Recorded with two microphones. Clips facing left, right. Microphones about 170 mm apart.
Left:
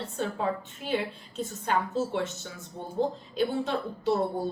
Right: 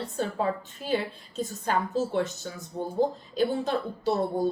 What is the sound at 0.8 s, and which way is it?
A woman's voice, 35° right (ahead or behind).